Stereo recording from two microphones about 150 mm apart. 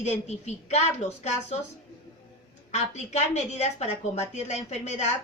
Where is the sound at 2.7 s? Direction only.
50° left (ahead or behind).